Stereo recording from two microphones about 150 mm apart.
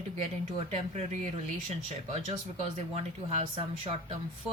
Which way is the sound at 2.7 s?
45° right (ahead or behind).